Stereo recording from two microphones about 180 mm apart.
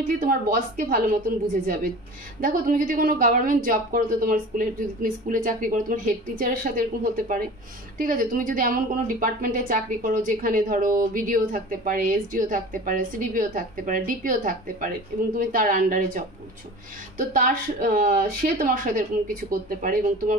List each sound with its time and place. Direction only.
0.2 s a woman's voice: 50° right (ahead or behind)
2.4 s a woman's voice: 50° right (ahead or behind)
17.3 s a woman's voice: 50° right (ahead or behind)